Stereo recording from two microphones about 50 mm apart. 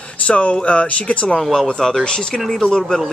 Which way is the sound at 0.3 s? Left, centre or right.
Left.